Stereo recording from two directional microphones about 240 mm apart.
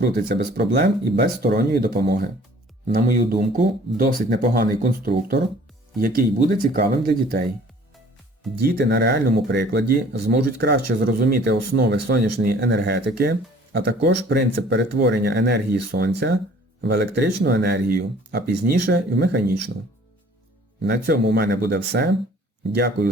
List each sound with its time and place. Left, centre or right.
0.0 s speech: right
8.6 s speech: right
20.8 s speech: right